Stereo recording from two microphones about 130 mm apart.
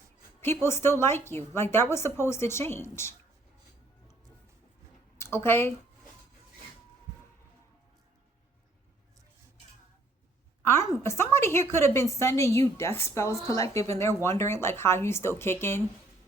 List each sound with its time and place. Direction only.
0.4 s a woman's voice: 20° left (ahead or behind)
5.1 s speech: 20° left (ahead or behind)
10.6 s a sound: 20° left (ahead or behind)
11.0 s a woman's voice: 20° left (ahead or behind)